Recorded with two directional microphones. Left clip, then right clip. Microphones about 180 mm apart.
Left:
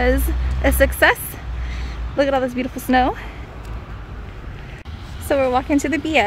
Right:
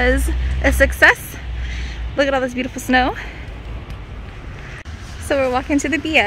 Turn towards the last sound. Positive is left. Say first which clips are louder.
# right 1 dB
turn(degrees=10)  # may be behind; listen again after turning